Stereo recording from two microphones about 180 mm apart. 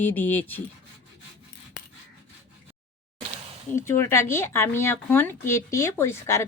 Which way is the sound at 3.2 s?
30° right (ahead or behind).